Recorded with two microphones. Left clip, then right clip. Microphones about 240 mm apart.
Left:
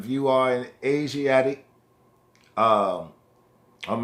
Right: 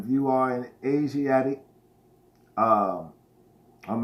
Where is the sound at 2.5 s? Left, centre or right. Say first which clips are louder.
Left 2 dB; left.